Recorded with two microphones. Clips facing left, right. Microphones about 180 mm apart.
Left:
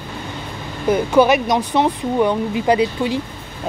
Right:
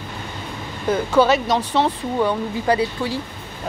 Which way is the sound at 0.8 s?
15° left (ahead or behind).